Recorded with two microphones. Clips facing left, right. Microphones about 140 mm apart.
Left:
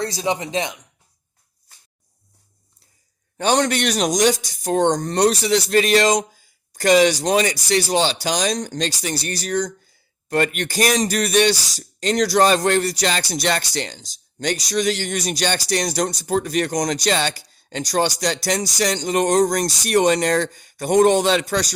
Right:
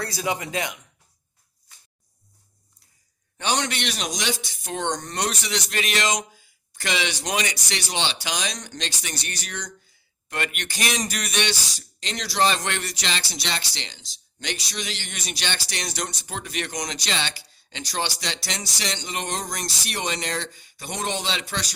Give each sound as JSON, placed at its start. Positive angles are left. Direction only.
{"t": 0.0, "sound": "speech", "side_deg": 25}
{"t": 3.3, "sound": "a man's voice", "side_deg": 40}